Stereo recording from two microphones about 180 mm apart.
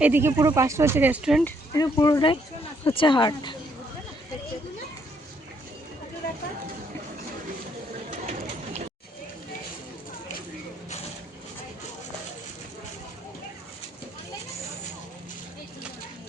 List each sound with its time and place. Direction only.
0.0 s speech: 10° right (ahead or behind)
1.7 s speech: 20° left (ahead or behind)